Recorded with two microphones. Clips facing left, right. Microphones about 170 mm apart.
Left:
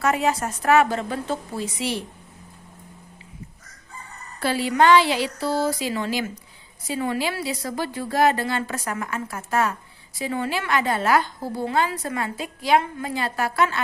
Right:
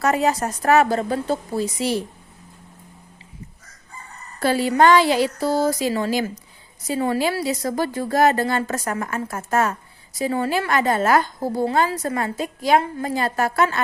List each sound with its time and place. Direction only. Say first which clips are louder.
0.0 s a woman's voice: right 2 dB; 40° right (ahead or behind)
4.4 s a woman's voice: right 3 dB; 45° right (ahead or behind)